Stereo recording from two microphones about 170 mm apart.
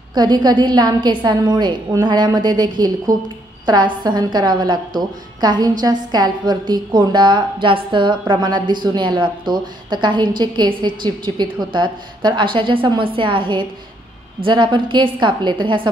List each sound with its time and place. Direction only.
0.1 s a woman's voice: 25° right (ahead or behind)